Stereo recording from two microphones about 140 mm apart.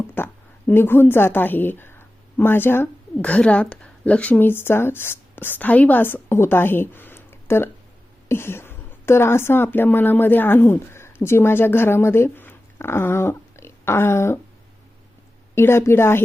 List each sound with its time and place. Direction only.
0.2 s a sound: 15° left (ahead or behind)
0.7 s a woman's voice: 15° left (ahead or behind)
15.5 s a woman's voice: 20° left (ahead or behind)